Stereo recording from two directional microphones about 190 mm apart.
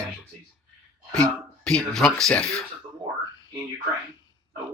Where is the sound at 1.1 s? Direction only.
5° left (ahead or behind).